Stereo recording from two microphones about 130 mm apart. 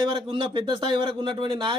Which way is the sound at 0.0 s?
35° right (ahead or behind).